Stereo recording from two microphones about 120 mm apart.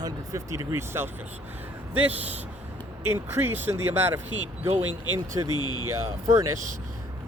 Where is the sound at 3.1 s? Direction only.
20° right (ahead or behind).